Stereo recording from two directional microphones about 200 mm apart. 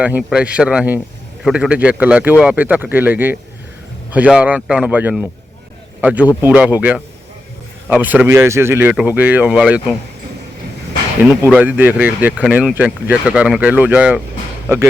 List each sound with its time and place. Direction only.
0.0 s speech: 5° right (ahead or behind)
11.5 s speech: 10° right (ahead or behind)